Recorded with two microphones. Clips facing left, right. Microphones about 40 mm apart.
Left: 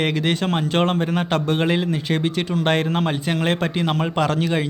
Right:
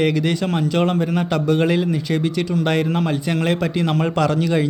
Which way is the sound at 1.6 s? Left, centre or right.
Left.